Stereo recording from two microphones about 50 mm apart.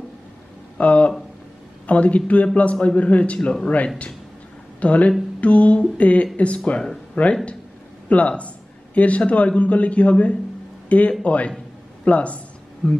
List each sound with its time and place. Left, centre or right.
0.7 s a man's voice: left
4.7 s a man's voice: left